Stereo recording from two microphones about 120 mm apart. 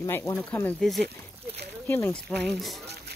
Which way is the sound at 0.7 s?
Centre (ahead or behind).